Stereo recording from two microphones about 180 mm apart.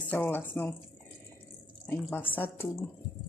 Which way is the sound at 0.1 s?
10° left (ahead or behind).